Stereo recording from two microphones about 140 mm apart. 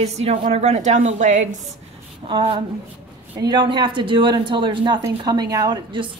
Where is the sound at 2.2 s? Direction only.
40° right (ahead or behind).